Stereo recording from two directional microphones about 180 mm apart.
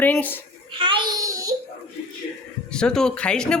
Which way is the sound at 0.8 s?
25° right (ahead or behind).